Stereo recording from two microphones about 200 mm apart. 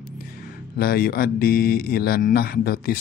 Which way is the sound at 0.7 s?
50° left (ahead or behind).